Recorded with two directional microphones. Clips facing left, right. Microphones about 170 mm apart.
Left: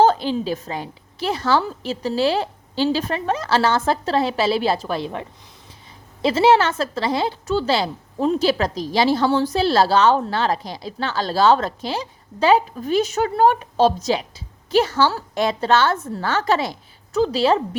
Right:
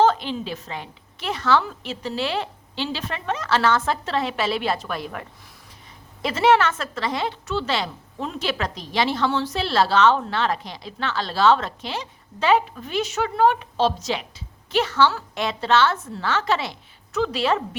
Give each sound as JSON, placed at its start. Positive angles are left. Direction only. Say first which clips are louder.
{"t": 0.0, "sound": "a woman's voice", "louder": "left 3 dB", "side_deg": 35}
{"t": 6.2, "sound": "a woman's voice", "louder": "left 3 dB", "side_deg": 30}